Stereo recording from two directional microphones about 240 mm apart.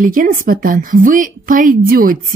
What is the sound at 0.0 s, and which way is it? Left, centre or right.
Speech, right.